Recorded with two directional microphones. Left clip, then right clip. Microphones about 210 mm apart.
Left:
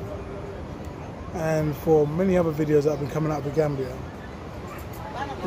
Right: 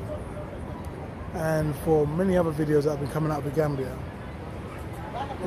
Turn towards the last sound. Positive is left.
turn(degrees=-5)  # may be behind; listen again after turning